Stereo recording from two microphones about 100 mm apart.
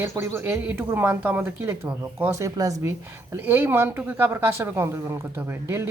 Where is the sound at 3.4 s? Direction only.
20° right (ahead or behind).